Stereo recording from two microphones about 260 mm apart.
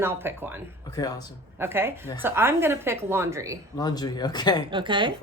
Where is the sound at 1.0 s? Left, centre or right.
Centre.